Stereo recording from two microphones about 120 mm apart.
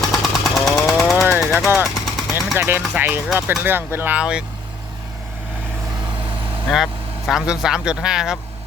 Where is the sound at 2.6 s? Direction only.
20° right (ahead or behind).